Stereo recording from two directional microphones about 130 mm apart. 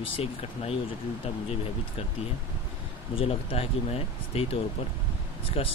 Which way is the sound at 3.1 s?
50° left (ahead or behind).